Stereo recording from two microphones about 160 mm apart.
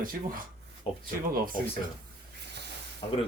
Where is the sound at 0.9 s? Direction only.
35° left (ahead or behind).